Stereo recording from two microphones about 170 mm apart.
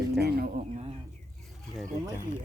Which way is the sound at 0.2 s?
65° right (ahead or behind).